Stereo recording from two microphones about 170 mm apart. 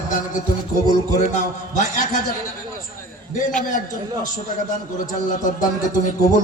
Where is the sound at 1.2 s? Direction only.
50° left (ahead or behind).